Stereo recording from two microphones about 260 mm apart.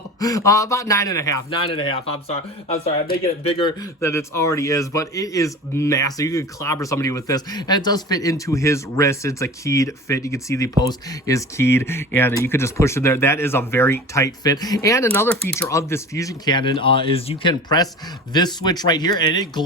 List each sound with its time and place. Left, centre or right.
0.2 s a man's voice: centre